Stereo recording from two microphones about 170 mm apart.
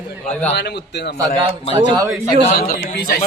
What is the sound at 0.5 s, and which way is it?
Speech, 80° left.